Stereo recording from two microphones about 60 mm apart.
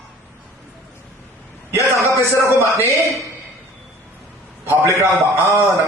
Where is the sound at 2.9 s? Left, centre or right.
Right.